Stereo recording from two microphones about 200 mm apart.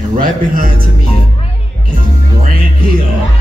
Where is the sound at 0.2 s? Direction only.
45° right (ahead or behind).